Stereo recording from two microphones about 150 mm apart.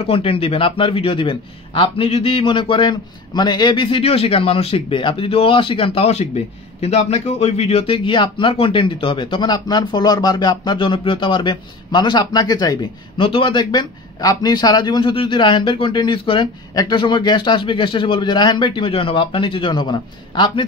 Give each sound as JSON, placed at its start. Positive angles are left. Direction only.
{"t": 0.0, "sound": "a man's voice", "side_deg": 40}